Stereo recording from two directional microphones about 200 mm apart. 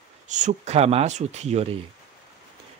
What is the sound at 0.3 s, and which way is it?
Speech, 35° right (ahead or behind).